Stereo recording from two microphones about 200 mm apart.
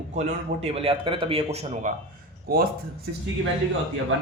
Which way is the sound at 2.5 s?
50° right (ahead or behind).